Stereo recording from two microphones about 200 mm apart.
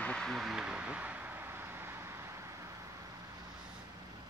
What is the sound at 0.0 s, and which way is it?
Vehicle, 5° left (ahead or behind).